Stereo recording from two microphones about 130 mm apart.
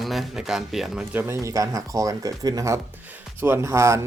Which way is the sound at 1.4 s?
25° right (ahead or behind).